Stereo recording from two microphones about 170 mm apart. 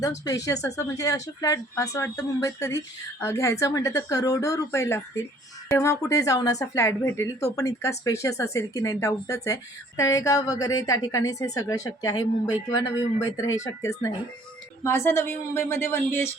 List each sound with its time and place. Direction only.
0.3 s speech: 20° left (ahead or behind)